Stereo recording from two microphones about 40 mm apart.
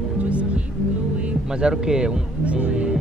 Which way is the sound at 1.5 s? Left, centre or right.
Right.